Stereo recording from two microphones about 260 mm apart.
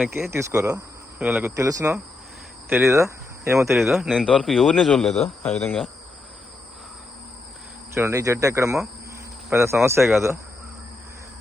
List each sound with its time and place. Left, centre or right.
0.0 s speech: centre
7.9 s speech: centre